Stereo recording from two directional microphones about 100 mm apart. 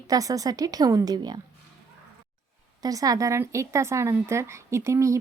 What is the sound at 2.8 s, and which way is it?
A woman's voice, 35° right (ahead or behind).